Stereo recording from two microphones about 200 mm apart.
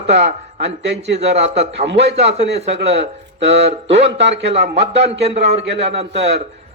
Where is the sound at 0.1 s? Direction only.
35° right (ahead or behind).